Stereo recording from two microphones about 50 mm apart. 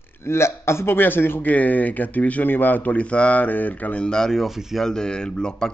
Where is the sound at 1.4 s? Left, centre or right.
Left.